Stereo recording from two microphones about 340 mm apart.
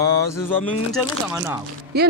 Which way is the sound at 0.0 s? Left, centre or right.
Centre.